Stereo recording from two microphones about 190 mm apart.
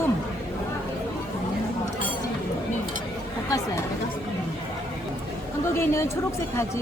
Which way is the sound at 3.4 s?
15° left (ahead or behind).